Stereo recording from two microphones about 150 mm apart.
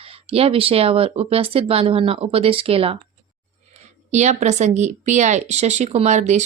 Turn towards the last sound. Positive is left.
turn(degrees=-50)  # may be behind; listen again after turning